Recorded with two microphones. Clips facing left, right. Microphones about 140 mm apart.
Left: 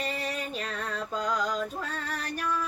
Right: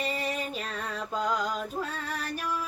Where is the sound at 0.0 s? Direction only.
10° right (ahead or behind).